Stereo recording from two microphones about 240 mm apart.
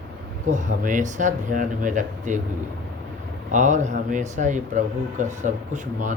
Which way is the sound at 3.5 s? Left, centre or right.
Right.